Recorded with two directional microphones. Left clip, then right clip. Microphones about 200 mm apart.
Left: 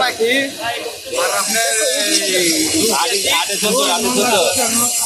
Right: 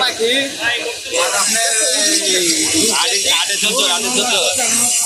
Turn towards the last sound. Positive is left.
turn(degrees=45)  # may be behind; listen again after turning